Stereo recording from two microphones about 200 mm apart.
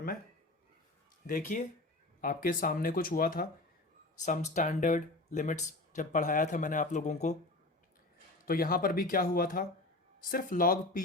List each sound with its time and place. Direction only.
1.3 s speech: 40° left (ahead or behind)
8.4 s speech: 45° left (ahead or behind)